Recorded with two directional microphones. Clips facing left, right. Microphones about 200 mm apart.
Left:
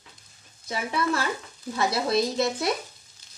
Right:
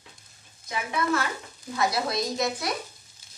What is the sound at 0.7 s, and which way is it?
Speech, 30° left (ahead or behind).